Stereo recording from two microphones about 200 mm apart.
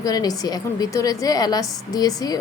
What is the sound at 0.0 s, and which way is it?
A woman's voice, 20° left (ahead or behind).